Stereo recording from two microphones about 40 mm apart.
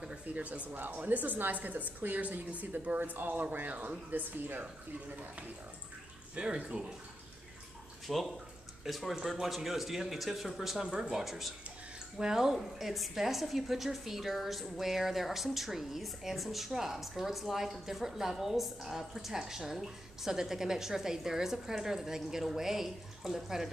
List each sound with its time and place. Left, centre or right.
0.3 s a woman's voice: right
0.7 s a woman's voice: right
3.0 s a woman's voice: right
6.3 s speech: right
8.1 s a woman's voice: centre
12.5 s a woman's voice: centre